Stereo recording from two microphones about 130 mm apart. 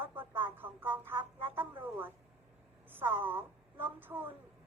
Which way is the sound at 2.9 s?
15° right (ahead or behind).